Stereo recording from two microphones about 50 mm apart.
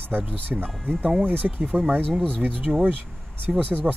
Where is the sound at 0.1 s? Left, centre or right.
Right.